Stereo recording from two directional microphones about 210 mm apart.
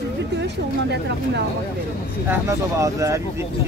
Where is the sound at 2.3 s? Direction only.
15° right (ahead or behind).